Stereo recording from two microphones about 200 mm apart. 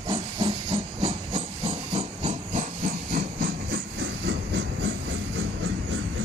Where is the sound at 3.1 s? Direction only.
55° right (ahead or behind).